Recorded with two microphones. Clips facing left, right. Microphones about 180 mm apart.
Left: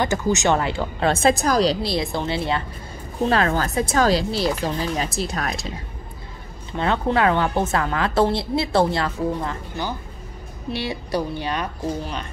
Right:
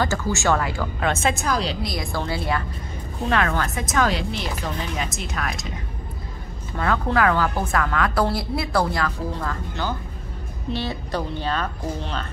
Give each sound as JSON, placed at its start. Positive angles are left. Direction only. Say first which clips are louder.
{"t": 0.0, "sound": "a woman's voice", "louder": "left 2 dB", "side_deg": 20}
{"t": 6.8, "sound": "a woman's voice", "louder": "left 1 dB", "side_deg": 25}